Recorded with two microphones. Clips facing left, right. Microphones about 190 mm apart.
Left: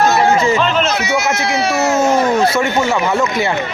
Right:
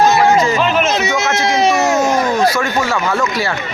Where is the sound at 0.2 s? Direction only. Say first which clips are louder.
Even; 25° left (ahead or behind).